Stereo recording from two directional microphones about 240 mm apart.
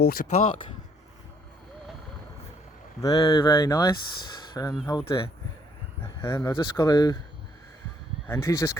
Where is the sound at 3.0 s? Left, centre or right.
Centre.